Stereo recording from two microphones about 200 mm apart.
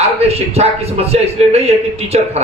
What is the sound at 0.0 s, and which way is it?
A man's voice, 30° right (ahead or behind).